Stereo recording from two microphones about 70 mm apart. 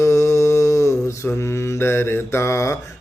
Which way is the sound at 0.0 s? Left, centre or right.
Left.